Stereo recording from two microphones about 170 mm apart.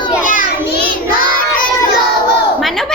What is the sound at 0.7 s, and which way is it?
Child singing, 55° left (ahead or behind).